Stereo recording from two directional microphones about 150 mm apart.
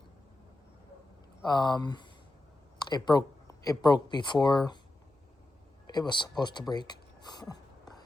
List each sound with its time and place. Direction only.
1.5 s speech: 30° left (ahead or behind)
5.9 s speech: 30° left (ahead or behind)